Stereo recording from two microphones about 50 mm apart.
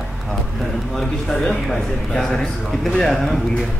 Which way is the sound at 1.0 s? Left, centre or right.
Centre.